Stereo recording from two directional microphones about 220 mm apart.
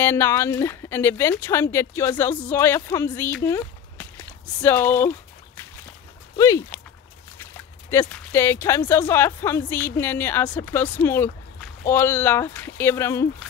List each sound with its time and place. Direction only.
0.0 s speech: 10° left (ahead or behind)
6.3 s speech: 15° left (ahead or behind)
7.9 s speech: 10° left (ahead or behind)